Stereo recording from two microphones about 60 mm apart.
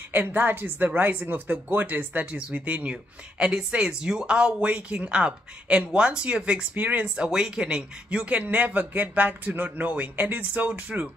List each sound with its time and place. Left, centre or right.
0.1 s speech: right
7.2 s speech: centre